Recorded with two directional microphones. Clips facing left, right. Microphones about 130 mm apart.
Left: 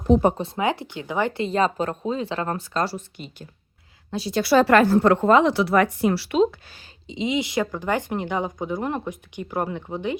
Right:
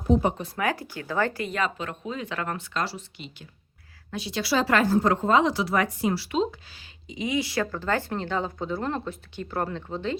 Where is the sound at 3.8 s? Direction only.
20° left (ahead or behind).